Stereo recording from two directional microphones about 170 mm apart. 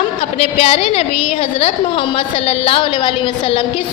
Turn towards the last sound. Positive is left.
turn(degrees=30)  # may be behind; listen again after turning